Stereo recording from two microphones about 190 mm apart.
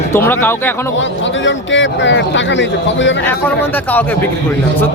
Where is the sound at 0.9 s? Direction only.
75° left (ahead or behind).